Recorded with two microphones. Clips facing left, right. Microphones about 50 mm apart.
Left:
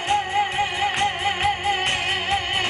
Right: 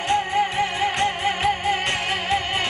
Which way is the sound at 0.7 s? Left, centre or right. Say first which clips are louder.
Even; left.